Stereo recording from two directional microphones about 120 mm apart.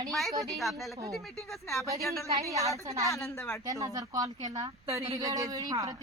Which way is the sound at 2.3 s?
30° right (ahead or behind).